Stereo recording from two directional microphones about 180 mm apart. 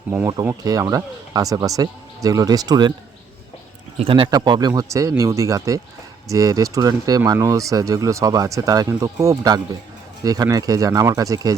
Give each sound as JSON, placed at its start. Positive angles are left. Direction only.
{"t": 0.1, "sound": "speech", "side_deg": -10}
{"t": 4.0, "sound": "speech", "side_deg": -30}